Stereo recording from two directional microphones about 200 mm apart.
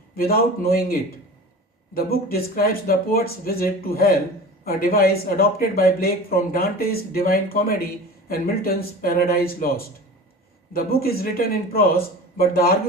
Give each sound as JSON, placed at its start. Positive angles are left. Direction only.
{"t": 0.2, "sound": "speech", "side_deg": 50}